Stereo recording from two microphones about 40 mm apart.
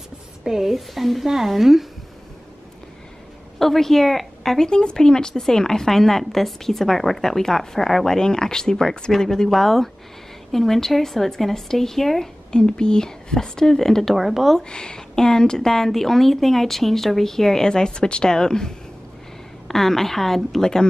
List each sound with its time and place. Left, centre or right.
0.4 s speech: centre
3.5 s a woman's voice: centre
4.6 s a woman's voice: centre
12.5 s a woman's voice: left
14.1 s speech: centre
14.7 s a woman's voice: left
17.6 s a woman's voice: centre
19.7 s a woman's voice: centre